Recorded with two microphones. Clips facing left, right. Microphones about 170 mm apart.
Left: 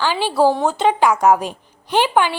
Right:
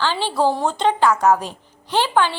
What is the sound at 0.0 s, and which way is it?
A woman's voice, 10° left (ahead or behind).